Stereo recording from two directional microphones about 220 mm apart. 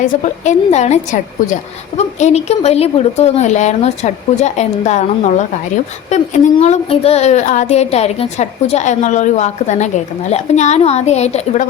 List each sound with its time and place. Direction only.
0.0 s speech: 30° left (ahead or behind)